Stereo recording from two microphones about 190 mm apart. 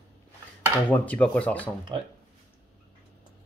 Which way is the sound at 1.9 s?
25° right (ahead or behind).